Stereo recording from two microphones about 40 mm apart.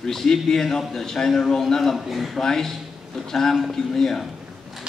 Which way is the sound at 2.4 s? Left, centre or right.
Centre.